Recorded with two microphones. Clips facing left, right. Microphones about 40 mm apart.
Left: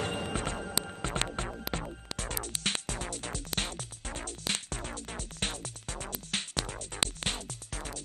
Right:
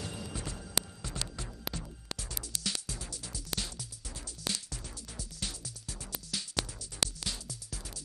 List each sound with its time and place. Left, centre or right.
0.0 s music: left